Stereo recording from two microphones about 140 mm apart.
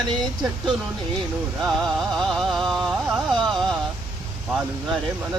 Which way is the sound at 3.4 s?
Centre (ahead or behind).